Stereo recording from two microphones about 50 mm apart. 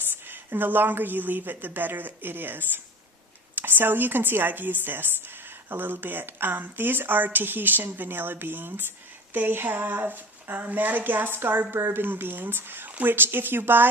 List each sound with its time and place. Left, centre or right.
0.3 s a woman's voice: right